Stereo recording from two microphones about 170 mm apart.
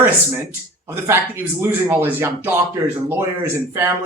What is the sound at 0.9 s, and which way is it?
Speech, 15° right (ahead or behind).